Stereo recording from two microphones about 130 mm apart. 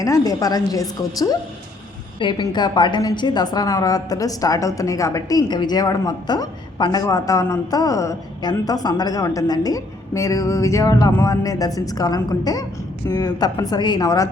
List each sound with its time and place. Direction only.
0.0 s a woman's voice: 25° left (ahead or behind)